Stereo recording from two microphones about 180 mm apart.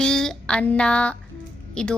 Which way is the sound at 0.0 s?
5° left (ahead or behind).